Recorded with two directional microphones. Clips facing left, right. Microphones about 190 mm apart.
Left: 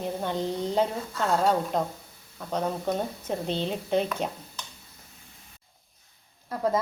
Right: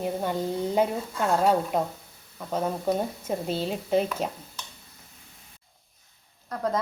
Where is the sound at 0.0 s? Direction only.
10° right (ahead or behind).